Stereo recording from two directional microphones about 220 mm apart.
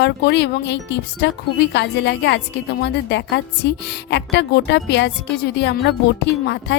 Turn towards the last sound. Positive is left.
turn(degrees=50)  # may be behind; listen again after turning